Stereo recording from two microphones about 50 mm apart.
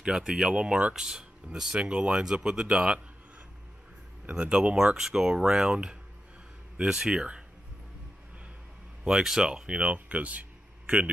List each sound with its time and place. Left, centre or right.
0.0 s speech: centre
0.9 s speech: centre
4.3 s speech: right
4.9 s speech: centre
9.0 s speech: centre
9.9 s speech: right